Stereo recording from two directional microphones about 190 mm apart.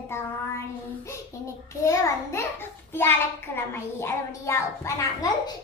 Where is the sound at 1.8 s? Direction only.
15° left (ahead or behind).